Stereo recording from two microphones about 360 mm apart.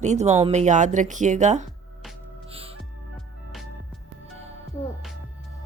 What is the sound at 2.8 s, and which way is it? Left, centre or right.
Music, centre.